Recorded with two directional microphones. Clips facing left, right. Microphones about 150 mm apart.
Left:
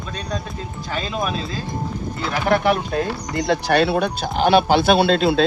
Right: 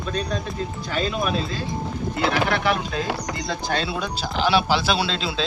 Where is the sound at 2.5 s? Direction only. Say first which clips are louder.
Left 5 dB; 45° left (ahead or behind).